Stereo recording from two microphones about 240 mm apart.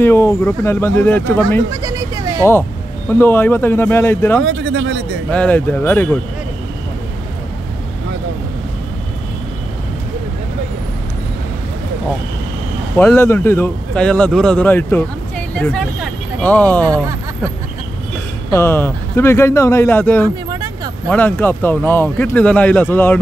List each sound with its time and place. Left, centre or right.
0.0 s speech: centre
1.7 s vehicle: centre
3.1 s speech: centre
4.5 s speech: right
5.3 s speech: centre
12.9 s speech: centre
16.8 s speech: centre
18.5 s speech: centre
20.4 s vehicle: centre
21.1 s speech: centre